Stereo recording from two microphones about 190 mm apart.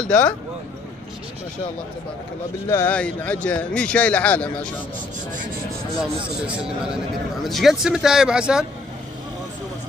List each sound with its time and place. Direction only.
0.0 s speech: 5° left (ahead or behind)
2.7 s speech: 10° left (ahead or behind)
6.4 s speech: 5° right (ahead or behind)